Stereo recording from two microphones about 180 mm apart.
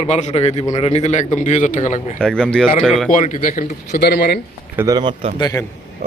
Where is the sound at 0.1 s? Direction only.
40° left (ahead or behind).